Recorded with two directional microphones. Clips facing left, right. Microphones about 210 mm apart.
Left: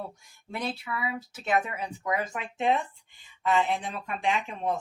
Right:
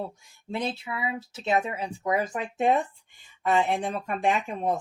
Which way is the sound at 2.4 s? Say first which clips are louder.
Right 2 dB; 45° right (ahead or behind).